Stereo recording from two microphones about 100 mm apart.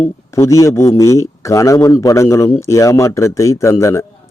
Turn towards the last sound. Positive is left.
turn(degrees=30)  # may be behind; listen again after turning